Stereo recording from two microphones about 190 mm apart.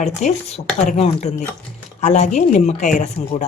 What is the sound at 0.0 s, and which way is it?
A woman's voice, 40° left (ahead or behind).